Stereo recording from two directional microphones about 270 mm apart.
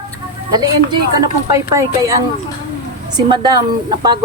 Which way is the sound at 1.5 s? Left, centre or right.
Centre.